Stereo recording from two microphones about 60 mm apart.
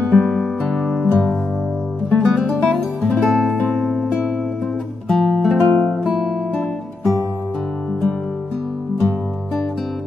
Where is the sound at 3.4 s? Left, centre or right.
Left.